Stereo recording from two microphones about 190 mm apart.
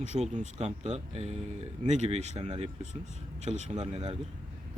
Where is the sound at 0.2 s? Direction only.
40° right (ahead or behind).